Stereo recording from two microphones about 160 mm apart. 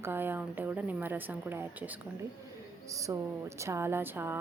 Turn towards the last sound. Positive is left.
turn(degrees=-15)  # may be behind; listen again after turning